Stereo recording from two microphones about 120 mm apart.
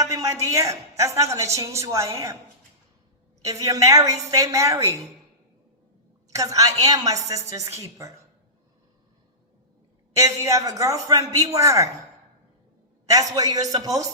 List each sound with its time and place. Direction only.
0.0 s a woman's voice: 25° right (ahead or behind)
3.4 s a woman's voice: 30° right (ahead or behind)
6.3 s a woman's voice: 30° right (ahead or behind)
10.2 s a woman's voice: 25° right (ahead or behind)
13.1 s a man's voice: 30° right (ahead or behind)